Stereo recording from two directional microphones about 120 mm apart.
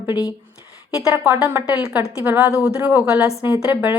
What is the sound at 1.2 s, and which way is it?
A woman's voice, 15° right (ahead or behind).